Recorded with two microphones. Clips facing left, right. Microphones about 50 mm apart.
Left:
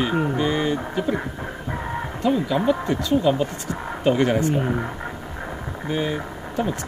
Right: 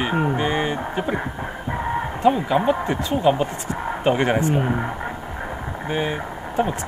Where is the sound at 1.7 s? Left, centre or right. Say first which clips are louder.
Right 5 dB; centre.